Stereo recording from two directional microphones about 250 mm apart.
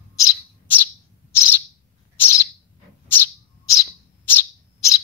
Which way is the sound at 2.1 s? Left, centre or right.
Centre.